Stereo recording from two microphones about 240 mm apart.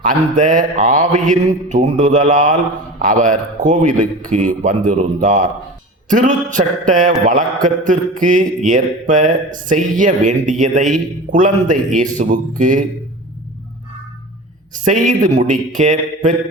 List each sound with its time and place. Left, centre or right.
0.1 s mantra: right
14.7 s mantra: right